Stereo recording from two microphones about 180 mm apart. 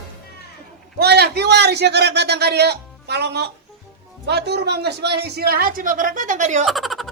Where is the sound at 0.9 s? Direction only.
60° right (ahead or behind); by 6.7 s 40° right (ahead or behind).